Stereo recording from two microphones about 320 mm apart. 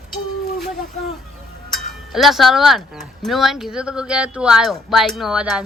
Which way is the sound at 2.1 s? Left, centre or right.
Centre.